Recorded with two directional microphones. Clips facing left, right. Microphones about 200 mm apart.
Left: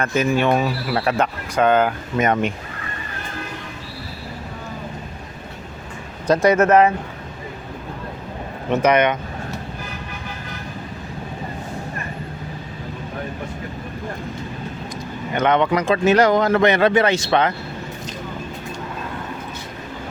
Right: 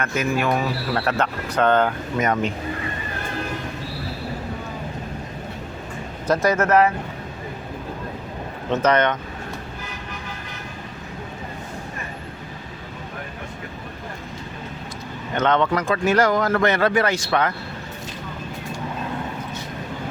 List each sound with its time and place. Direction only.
0.0 s speech: 30° left (ahead or behind)
0.9 s speech: 15° left (ahead or behind)
2.1 s speech: 20° left (ahead or behind)
6.2 s speech: 15° left (ahead or behind)
8.7 s speech: 10° left (ahead or behind)
15.4 s speech: 15° left (ahead or behind)